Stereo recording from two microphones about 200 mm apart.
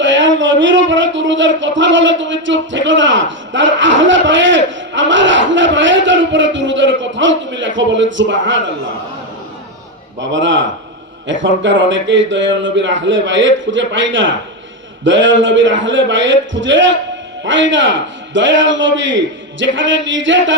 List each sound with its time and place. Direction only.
0.0 s speech: 65° right (ahead or behind)
10.2 s speech: 65° right (ahead or behind)